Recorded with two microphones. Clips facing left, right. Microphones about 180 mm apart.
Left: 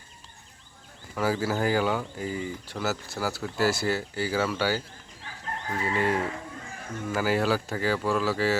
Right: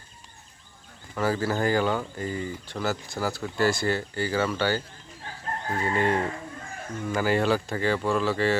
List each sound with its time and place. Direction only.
1.1 s speech: 10° left (ahead or behind)
5.2 s chicken: 40° right (ahead or behind)
5.8 s speech: 5° left (ahead or behind)